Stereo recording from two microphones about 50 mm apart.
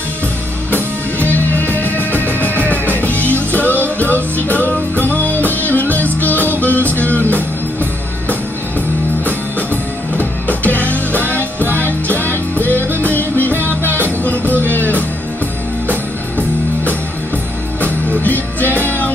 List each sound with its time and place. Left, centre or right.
1.6 s music: left
10.1 s music: left
18.2 s music: left